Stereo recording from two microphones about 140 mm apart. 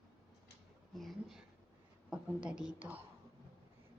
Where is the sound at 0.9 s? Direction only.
Centre (ahead or behind).